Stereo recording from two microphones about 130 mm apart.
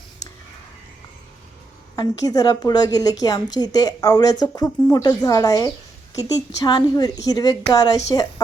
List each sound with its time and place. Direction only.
2.0 s a woman's voice: 30° left (ahead or behind)